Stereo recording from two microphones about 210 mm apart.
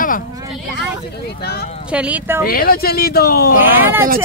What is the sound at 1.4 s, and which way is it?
Speech, 50° left (ahead or behind).